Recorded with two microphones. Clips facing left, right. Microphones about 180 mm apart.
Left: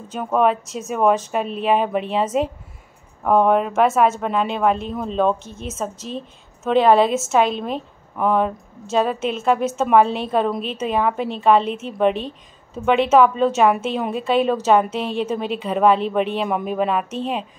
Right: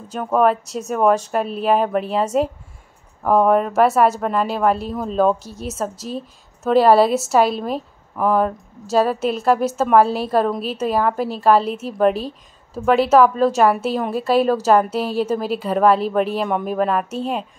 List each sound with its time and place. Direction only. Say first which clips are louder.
0.1 s a woman's voice: right 1 dB; centre (ahead or behind)
5.4 s speech: right 2 dB; 40° right (ahead or behind)
6.0 s a woman's voice: right 2 dB; 5° right (ahead or behind)